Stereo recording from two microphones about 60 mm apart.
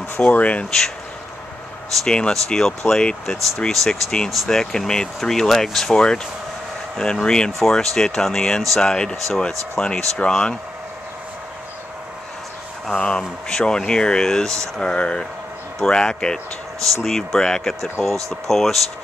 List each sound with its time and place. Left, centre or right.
0.2 s speech: left
0.7 s speech: centre
2.0 s speech: centre
12.9 s speech: centre
16.8 s speech: centre